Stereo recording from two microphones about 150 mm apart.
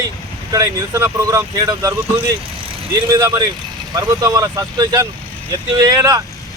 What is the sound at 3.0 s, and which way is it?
Speech, 20° right (ahead or behind).